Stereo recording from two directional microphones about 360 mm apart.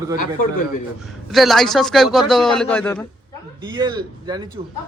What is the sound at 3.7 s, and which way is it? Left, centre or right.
Speech, centre.